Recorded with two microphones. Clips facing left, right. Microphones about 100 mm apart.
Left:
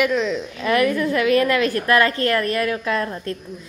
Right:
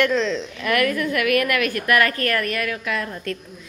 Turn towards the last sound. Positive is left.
turn(degrees=30)  # may be behind; listen again after turning